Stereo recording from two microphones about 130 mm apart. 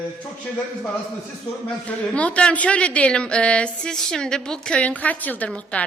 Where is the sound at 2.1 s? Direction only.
10° left (ahead or behind).